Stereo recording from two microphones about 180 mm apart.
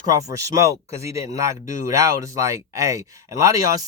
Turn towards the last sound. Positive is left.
turn(degrees=-20)  # may be behind; listen again after turning